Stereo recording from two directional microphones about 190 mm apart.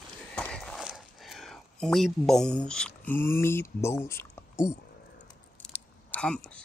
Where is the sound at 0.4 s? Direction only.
5° left (ahead or behind).